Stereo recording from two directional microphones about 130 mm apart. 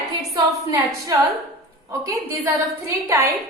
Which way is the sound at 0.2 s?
25° right (ahead or behind).